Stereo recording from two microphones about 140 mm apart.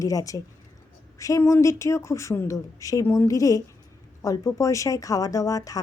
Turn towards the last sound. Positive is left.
turn(degrees=25)  # may be behind; listen again after turning